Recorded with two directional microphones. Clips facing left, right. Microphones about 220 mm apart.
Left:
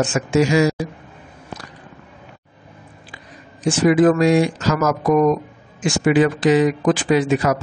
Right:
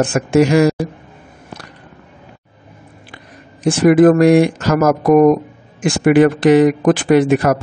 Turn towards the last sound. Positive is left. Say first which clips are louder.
# right 5 dB
turn(degrees=-55)  # may be behind; listen again after turning